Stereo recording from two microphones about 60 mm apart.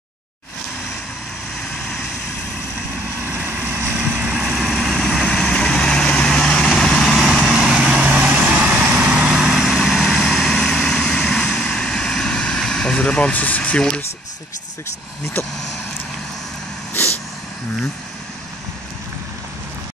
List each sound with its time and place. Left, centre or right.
3.3 s vehicle: right
4.3 s vehicle: centre
5.5 s vehicle: centre
7.1 s vehicle: centre
7.5 s vehicle: centre
11.4 s vehicle: left
12.9 s speech: left